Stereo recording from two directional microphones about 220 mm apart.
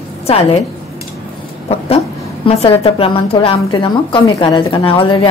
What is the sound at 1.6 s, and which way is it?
A woman's voice, 25° left (ahead or behind).